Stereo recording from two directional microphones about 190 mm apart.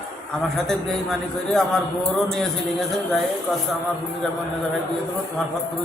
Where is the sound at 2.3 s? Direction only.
Centre (ahead or behind).